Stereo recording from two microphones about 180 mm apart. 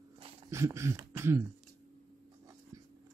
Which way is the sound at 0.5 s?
15° right (ahead or behind).